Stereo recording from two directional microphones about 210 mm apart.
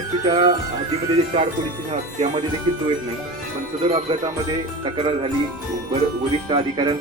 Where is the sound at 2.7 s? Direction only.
20° right (ahead or behind).